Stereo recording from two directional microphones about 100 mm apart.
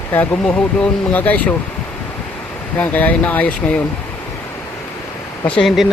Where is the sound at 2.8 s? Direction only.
15° left (ahead or behind).